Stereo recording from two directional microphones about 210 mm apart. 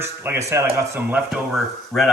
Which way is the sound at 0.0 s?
10° right (ahead or behind).